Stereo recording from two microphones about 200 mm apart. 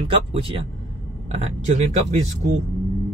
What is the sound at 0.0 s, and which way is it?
Speech, 30° right (ahead or behind).